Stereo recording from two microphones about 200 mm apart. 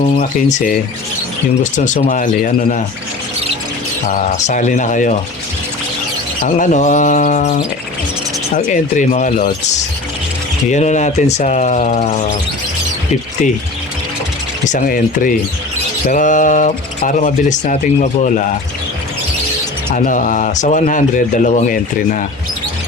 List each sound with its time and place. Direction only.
0.0 s speech: 40° left (ahead or behind)
4.0 s speech: 35° left (ahead or behind)
6.4 s speech: 40° left (ahead or behind)
14.6 s speech: 40° left (ahead or behind)
19.9 s speech: 40° left (ahead or behind)